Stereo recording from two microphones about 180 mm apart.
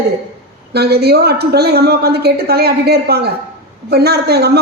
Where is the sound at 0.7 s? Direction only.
65° right (ahead or behind).